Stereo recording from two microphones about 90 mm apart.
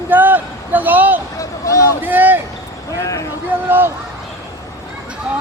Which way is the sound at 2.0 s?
20° right (ahead or behind).